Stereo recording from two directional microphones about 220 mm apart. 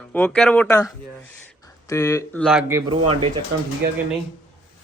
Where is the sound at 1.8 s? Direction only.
15° left (ahead or behind).